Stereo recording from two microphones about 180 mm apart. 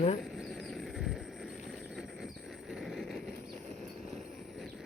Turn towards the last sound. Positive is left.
turn(degrees=0)  # may be behind; listen again after turning